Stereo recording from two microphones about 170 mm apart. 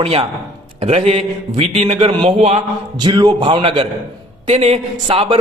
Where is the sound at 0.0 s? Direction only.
35° right (ahead or behind).